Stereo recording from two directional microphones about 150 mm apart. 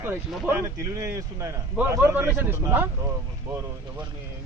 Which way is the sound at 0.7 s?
20° right (ahead or behind).